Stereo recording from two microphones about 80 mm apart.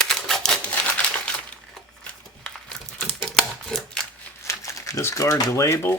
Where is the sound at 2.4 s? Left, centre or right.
Centre.